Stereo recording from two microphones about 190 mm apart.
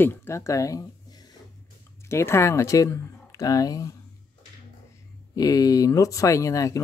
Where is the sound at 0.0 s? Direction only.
10° left (ahead or behind).